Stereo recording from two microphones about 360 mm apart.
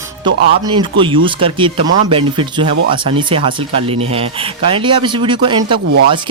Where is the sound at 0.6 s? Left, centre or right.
Centre.